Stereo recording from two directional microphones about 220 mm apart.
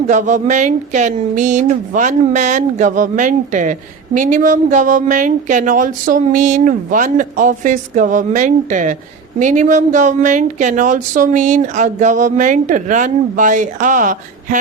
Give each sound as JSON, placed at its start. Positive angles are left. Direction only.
{"t": 0.1, "sound": "speech", "side_deg": -35}